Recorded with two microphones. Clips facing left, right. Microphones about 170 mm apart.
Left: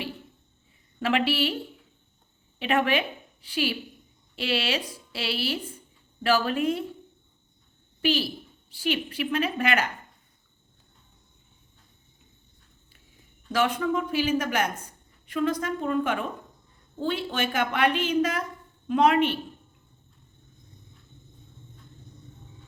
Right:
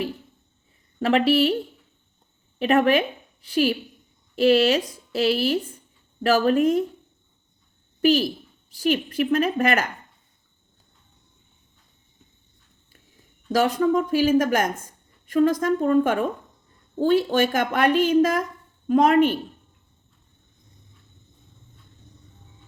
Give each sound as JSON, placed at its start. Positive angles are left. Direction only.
{"t": 0.9, "sound": "a woman's voice", "side_deg": -40}
{"t": 2.6, "sound": "a woman's voice", "side_deg": -40}
{"t": 8.0, "sound": "a woman's voice", "side_deg": -45}
{"t": 13.5, "sound": "a woman's voice", "side_deg": -40}